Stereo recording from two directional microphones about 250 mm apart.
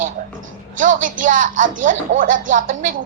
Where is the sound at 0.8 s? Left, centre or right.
Right.